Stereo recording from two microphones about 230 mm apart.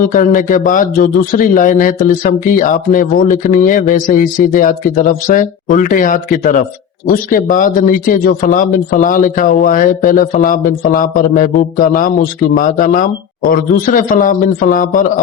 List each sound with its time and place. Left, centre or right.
0.0 s a man's voice: left